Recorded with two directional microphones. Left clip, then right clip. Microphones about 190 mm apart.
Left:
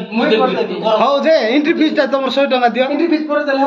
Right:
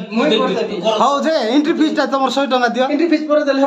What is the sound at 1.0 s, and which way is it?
A man's voice, 15° right (ahead or behind).